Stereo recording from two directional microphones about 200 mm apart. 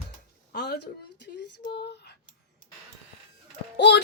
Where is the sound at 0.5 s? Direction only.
55° left (ahead or behind).